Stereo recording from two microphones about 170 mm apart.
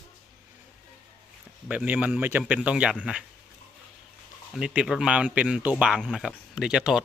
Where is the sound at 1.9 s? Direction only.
10° right (ahead or behind).